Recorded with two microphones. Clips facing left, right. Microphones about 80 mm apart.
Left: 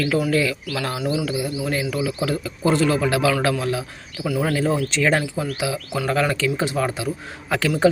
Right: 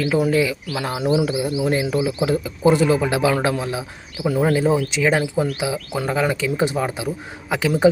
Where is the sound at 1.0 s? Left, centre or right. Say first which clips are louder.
Right 6 dB; right.